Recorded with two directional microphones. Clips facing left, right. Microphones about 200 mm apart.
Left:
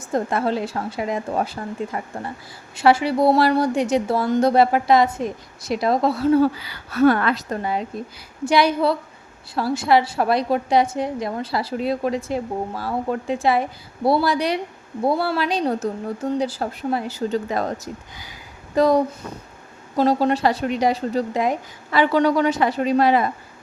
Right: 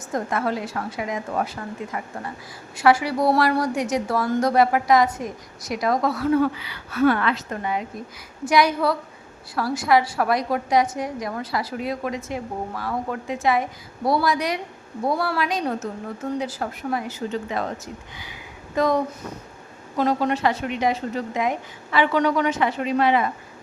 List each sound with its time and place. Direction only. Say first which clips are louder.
0.1 s a woman's voice: left 3 dB; 30° left (ahead or behind)
18.2 s a sound: right 1 dB; 40° left (ahead or behind)
20.0 s speech: left 3 dB; 30° left (ahead or behind)